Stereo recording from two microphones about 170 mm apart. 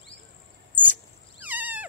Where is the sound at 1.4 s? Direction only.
10° right (ahead or behind).